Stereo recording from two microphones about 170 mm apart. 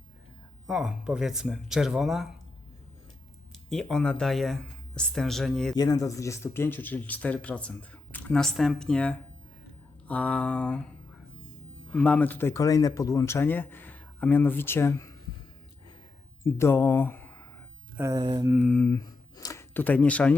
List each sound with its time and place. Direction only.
0.7 s speech: 5° right (ahead or behind)
3.7 s speech: centre (ahead or behind)
5.7 s speech: 20° left (ahead or behind); by 10.8 s 5° left (ahead or behind)
11.9 s speech: 10° left (ahead or behind)
16.4 s speech: 15° left (ahead or behind)
17.9 s speech: 20° right (ahead or behind)
18.4 s mantra: 5° right (ahead or behind)
18.8 s a sound: 15° left (ahead or behind)